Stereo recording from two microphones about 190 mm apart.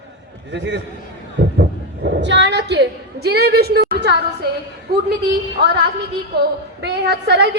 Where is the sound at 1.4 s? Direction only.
70° right (ahead or behind).